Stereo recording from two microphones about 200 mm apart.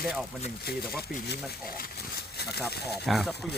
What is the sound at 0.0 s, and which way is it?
Speech, 5° right (ahead or behind).